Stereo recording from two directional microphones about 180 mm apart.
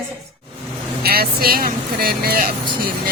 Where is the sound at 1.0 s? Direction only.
60° right (ahead or behind).